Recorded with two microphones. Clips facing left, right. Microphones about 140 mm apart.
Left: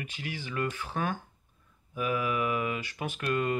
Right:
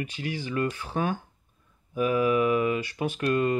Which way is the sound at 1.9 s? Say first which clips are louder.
Right 7 dB; 35° right (ahead or behind).